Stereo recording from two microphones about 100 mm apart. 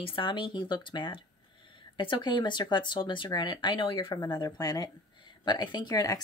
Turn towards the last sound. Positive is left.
turn(degrees=40)  # may be behind; listen again after turning